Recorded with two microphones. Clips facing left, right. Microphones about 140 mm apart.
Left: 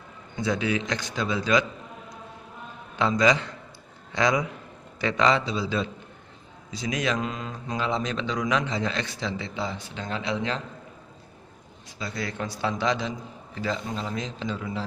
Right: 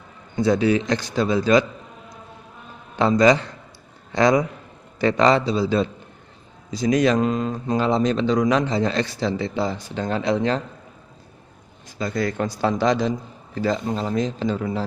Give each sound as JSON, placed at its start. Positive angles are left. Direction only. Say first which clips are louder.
{"t": 0.3, "sound": "speech", "louder": "right 8 dB", "side_deg": -40}
{"t": 2.9, "sound": "speech", "louder": "right 6 dB", "side_deg": -40}
{"t": 11.9, "sound": "speech", "louder": "right 8 dB", "side_deg": -50}